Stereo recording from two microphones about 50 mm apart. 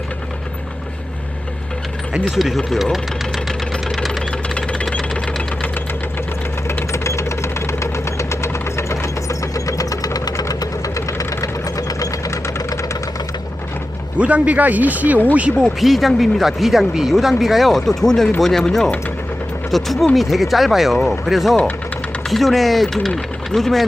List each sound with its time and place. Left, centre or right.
2.3 s speech: centre
3.9 s engine knocking: centre
4.4 s engine knocking: left
6.9 s engine knocking: left
10.9 s engine knocking: left
12.3 s engine: left
14.2 s speech: right
15.6 s speech: centre
19.7 s speech: centre